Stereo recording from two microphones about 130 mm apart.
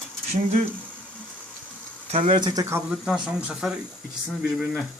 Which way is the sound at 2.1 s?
40° right (ahead or behind).